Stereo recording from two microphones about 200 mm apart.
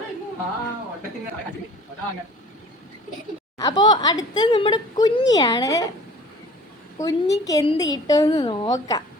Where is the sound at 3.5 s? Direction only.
20° left (ahead or behind).